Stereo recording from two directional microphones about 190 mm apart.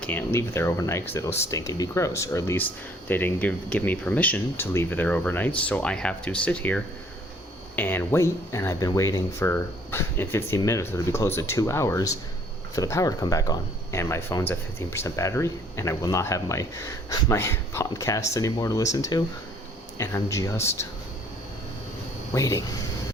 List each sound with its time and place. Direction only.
0.0 s speech: 10° left (ahead or behind)
22.4 s speech: 15° left (ahead or behind)